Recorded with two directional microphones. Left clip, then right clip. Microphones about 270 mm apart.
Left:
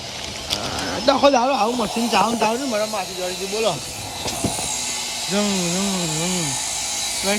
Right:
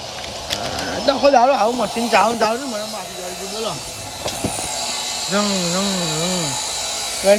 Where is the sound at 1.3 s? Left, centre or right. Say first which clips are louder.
Right 4 dB; left.